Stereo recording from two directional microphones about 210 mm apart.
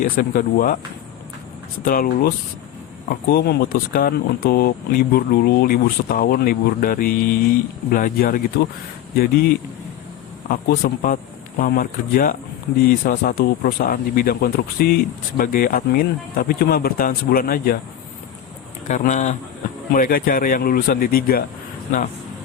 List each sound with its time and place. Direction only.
0.0 s speech: 40° left (ahead or behind)
1.8 s speech: 45° left (ahead or behind)
10.5 s speech: 45° left (ahead or behind)
18.9 s speech: 35° left (ahead or behind)